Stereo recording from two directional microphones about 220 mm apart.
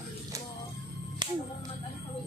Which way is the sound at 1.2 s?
20° right (ahead or behind).